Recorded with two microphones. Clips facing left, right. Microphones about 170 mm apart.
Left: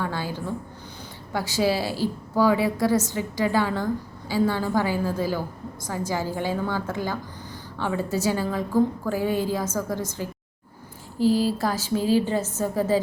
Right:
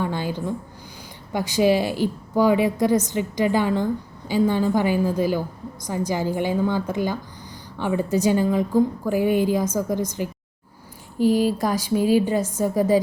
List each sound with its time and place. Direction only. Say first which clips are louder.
0.0 s a woman's voice: right 3 dB; 20° right (ahead or behind)